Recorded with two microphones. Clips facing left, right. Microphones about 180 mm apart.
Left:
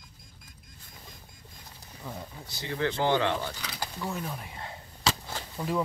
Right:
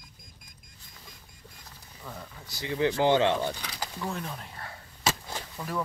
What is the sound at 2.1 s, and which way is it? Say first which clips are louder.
Speech: left 2 dB; 20° left (ahead or behind).